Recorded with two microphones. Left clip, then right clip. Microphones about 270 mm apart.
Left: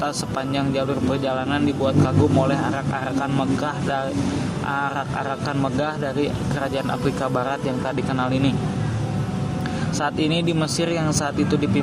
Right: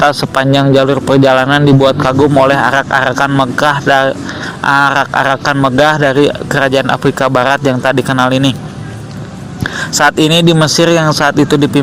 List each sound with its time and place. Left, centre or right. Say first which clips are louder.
0.0 s a man's voice: right 15 dB; right
10.0 s a man's voice: right 15 dB; right